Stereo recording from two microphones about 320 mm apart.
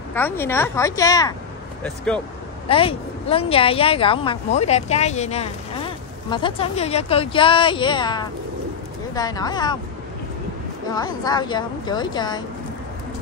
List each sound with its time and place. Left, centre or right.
0.1 s speech: centre
2.7 s speech: centre
10.9 s speech: centre